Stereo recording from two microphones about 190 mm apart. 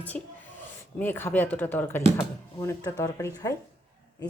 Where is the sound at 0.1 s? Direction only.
5° left (ahead or behind).